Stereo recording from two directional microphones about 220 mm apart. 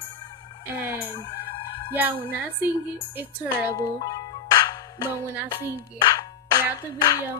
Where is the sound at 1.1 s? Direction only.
20° left (ahead or behind).